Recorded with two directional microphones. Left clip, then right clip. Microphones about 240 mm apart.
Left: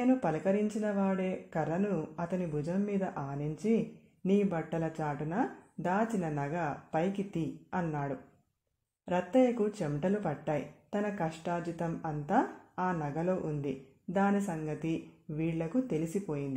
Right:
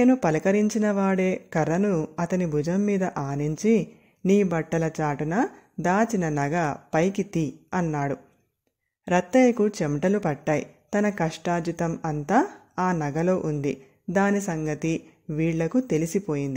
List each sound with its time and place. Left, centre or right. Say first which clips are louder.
0.0 s speech: right 9 dB; right